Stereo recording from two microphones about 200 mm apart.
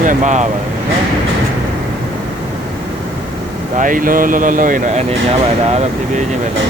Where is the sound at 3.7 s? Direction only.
40° right (ahead or behind).